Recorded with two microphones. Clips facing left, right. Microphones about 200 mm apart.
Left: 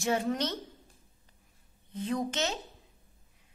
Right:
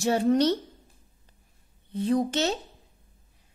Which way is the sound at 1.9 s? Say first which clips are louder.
Right 7 dB; 35° right (ahead or behind).